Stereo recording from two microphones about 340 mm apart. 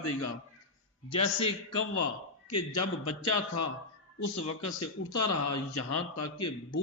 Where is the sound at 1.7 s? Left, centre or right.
Left.